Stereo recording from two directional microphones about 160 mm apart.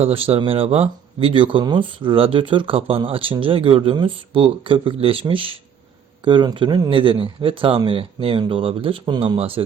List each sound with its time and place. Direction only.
0.0 s speech: 35° right (ahead or behind)